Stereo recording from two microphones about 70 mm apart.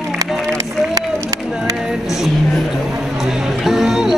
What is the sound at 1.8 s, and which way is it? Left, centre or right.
Music, centre.